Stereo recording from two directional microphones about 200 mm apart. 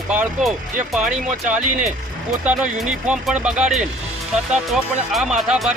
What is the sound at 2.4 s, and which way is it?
Speech, 5° right (ahead or behind).